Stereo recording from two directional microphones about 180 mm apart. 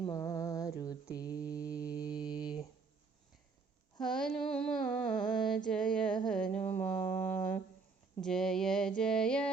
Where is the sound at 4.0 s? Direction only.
5° left (ahead or behind).